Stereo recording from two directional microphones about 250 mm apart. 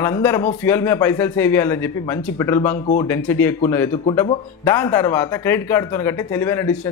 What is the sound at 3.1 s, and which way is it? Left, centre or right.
Speech, centre.